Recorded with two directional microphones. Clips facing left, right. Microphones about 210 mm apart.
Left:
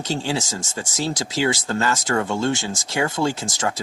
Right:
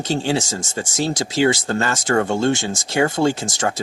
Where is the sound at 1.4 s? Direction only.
55° right (ahead or behind).